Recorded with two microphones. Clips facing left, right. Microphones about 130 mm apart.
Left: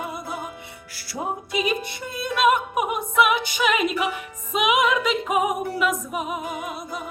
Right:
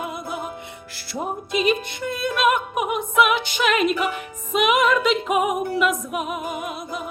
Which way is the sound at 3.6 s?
5° left (ahead or behind).